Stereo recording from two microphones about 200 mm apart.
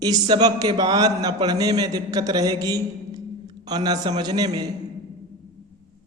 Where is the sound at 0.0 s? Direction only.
20° right (ahead or behind).